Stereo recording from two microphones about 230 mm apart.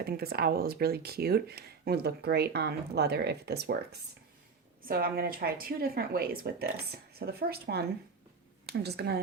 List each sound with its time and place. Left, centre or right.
0.0 s a woman's voice: right